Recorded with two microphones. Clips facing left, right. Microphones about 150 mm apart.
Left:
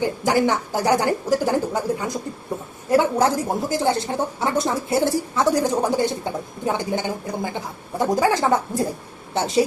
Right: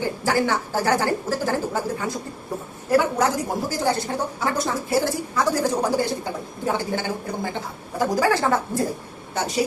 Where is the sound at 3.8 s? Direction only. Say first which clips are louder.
Left 2 dB; 25° left (ahead or behind).